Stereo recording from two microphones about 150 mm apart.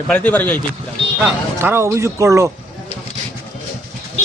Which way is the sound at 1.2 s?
15° right (ahead or behind).